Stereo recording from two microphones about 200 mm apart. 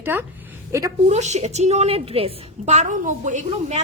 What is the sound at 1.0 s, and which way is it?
A woman's voice, 35° right (ahead or behind).